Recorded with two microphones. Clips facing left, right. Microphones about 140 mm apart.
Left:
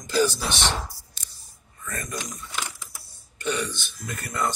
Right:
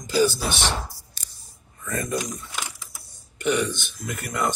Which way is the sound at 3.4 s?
15° right (ahead or behind).